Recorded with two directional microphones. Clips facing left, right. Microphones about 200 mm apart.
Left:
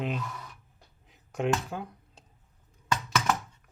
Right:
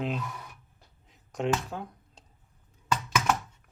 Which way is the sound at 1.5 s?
Centre (ahead or behind).